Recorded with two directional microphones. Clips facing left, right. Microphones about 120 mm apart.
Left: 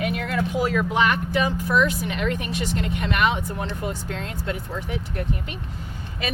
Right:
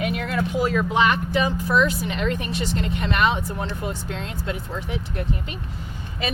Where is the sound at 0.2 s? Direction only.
30° right (ahead or behind).